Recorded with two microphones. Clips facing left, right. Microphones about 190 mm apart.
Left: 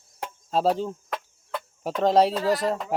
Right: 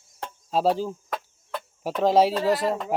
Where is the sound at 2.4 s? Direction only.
25° right (ahead or behind).